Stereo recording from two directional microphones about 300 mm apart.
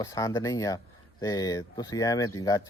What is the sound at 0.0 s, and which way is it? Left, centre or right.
Speech, centre.